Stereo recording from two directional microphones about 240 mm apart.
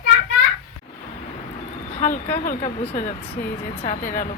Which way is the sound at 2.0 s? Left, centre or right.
Left.